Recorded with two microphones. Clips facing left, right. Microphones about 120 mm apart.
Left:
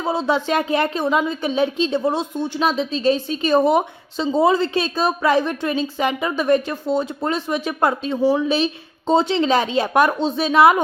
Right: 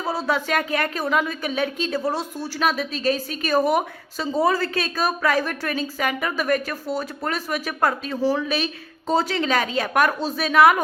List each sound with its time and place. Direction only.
0.0 s a woman's voice: 25° left (ahead or behind)